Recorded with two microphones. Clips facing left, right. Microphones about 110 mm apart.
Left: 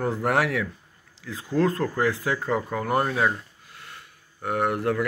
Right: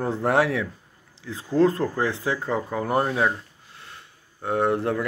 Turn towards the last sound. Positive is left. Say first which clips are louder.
# right 1 dB
turn(degrees=-25)  # may be behind; listen again after turning